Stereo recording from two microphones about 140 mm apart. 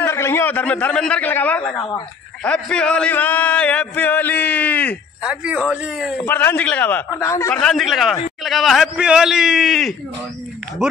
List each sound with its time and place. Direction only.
0.0 s a man's voice: 20° left (ahead or behind)
5.2 s a man's voice: 10° right (ahead or behind)
6.1 s a man's voice: 15° left (ahead or behind)
7.5 s a man's voice: 5° left (ahead or behind)